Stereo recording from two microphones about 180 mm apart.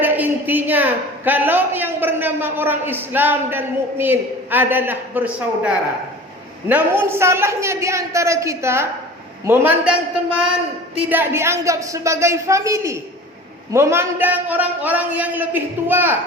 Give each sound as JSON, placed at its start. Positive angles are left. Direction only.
{"t": 0.0, "sound": "a man's voice", "side_deg": -10}